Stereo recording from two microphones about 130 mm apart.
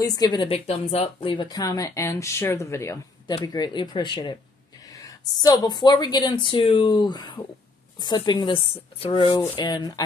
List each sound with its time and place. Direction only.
0.0 s speech: 30° left (ahead or behind)
0.5 s speech: 50° left (ahead or behind); by 3.0 s 20° left (ahead or behind)
3.3 s a woman's voice: 35° left (ahead or behind)